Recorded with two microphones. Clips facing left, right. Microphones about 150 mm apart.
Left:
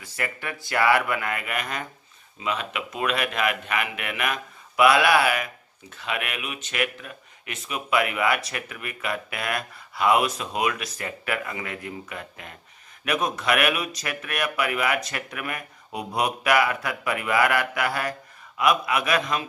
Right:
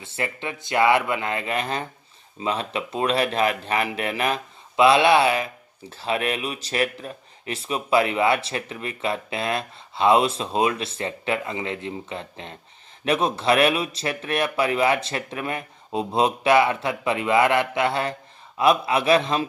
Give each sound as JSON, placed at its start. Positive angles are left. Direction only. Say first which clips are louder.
{"t": 0.0, "sound": "speech", "louder": "right 3 dB", "side_deg": -25}